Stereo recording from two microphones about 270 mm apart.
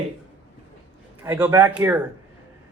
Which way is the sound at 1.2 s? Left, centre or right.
Centre.